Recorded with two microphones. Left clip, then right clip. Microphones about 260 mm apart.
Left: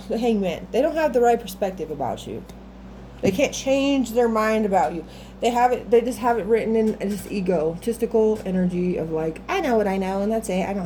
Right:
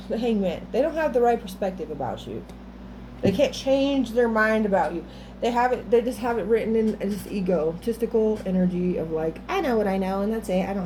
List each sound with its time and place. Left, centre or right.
0.1 s a woman's voice: left
3.2 s a woman's voice: left